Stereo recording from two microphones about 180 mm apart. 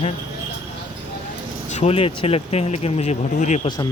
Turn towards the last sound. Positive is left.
turn(degrees=40)  # may be behind; listen again after turning